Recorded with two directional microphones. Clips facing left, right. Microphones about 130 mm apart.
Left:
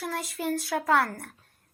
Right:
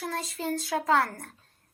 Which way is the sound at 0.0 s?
25° right (ahead or behind).